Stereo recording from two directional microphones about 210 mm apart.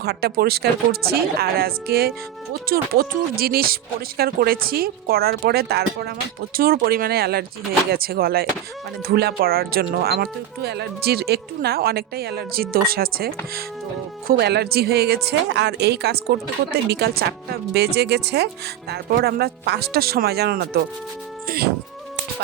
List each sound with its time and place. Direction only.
0.0 s speech: 50° right (ahead or behind)
21.4 s insect: 45° right (ahead or behind)